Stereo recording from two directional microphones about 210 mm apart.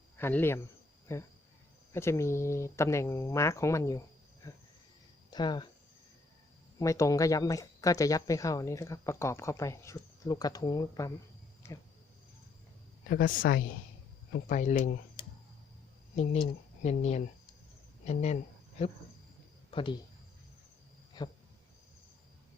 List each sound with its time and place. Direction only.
0.2 s speech: 10° left (ahead or behind)
5.3 s speech: 20° left (ahead or behind)
6.7 s speech: 15° left (ahead or behind)
13.1 s a man's voice: 45° left (ahead or behind)
16.1 s speech: 30° left (ahead or behind)
21.2 s cricket: 20° left (ahead or behind)